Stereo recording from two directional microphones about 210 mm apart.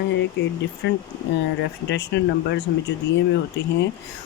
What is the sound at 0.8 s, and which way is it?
Speech, 55° left (ahead or behind).